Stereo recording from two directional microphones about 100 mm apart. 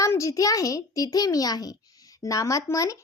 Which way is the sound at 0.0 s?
30° left (ahead or behind).